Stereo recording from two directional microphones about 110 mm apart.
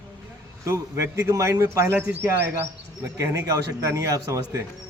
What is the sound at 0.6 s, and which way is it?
Speech, 25° right (ahead or behind).